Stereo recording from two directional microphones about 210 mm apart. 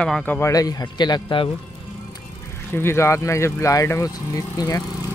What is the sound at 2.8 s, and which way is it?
Speech, 10° left (ahead or behind).